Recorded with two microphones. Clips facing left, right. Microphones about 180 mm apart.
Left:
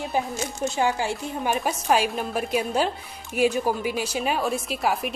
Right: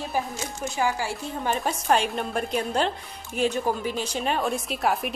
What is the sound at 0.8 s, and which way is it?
A woman's voice, 20° left (ahead or behind).